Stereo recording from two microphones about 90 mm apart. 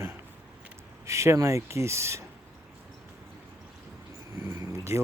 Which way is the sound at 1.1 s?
35° right (ahead or behind).